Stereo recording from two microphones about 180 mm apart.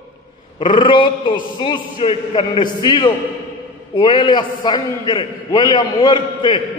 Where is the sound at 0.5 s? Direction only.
25° left (ahead or behind).